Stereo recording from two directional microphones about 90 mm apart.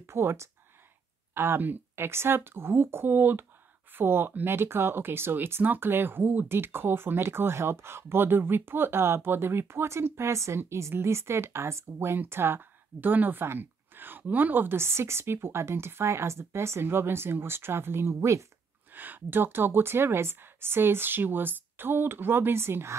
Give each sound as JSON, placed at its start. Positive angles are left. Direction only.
{"t": 0.0, "sound": "speech", "side_deg": -30}
{"t": 18.9, "sound": "speech", "side_deg": -20}